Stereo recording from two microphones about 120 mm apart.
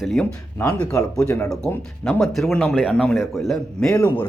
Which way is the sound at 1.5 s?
5° left (ahead or behind).